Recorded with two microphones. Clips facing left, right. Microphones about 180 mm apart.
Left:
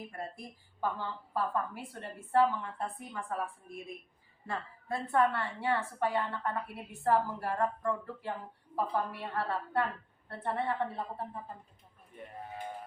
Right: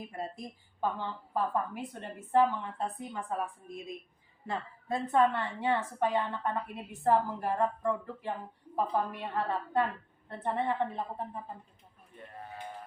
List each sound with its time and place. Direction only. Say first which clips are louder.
0.0 s a woman's voice: right 3 dB; 20° right (ahead or behind)